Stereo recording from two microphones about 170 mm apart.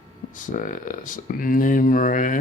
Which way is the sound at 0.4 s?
50° left (ahead or behind).